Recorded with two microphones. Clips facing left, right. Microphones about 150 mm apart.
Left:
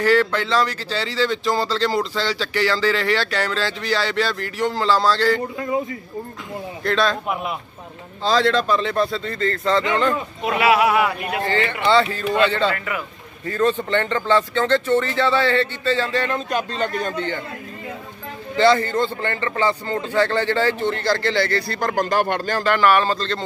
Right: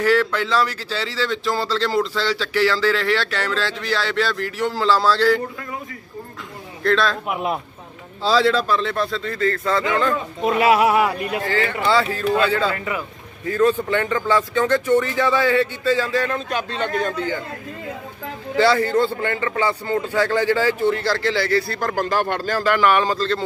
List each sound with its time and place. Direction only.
0.0 s speech: 5° right (ahead or behind)
6.8 s speech: centre (ahead or behind)
10.6 s speech: 40° right (ahead or behind)
11.4 s speech: 5° right (ahead or behind)
12.7 s a man's voice: 25° right (ahead or behind)
13.5 s speech: 10° right (ahead or behind)
18.6 s speech: 10° right (ahead or behind)